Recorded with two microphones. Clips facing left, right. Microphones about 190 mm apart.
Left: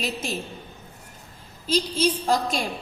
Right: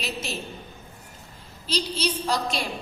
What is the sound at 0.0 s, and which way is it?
Speech, 50° left (ahead or behind).